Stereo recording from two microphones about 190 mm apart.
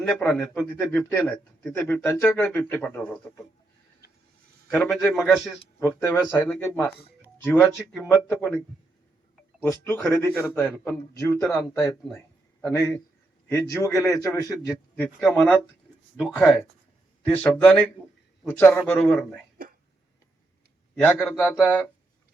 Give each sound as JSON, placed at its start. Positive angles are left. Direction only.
{"t": 0.1, "sound": "a man's voice", "side_deg": 5}
{"t": 4.7, "sound": "a man's voice", "side_deg": 5}
{"t": 6.0, "sound": "a man's voice", "side_deg": 15}
{"t": 9.6, "sound": "a man's voice", "side_deg": 10}
{"t": 11.6, "sound": "a man's voice", "side_deg": 5}
{"t": 14.9, "sound": "a man's voice", "side_deg": 5}
{"t": 17.2, "sound": "a man's voice", "side_deg": 10}
{"t": 21.0, "sound": "a man's voice", "side_deg": 10}